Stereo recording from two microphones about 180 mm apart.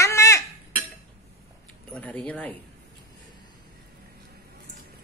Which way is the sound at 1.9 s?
5° left (ahead or behind).